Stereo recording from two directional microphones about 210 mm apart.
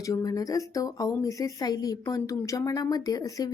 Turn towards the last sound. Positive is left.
turn(degrees=15)  # may be behind; listen again after turning